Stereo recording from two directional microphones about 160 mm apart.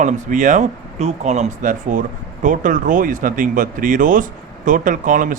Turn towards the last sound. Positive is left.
turn(degrees=-55)  # may be behind; listen again after turning